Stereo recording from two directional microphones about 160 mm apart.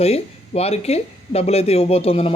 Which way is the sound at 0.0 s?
40° left (ahead or behind).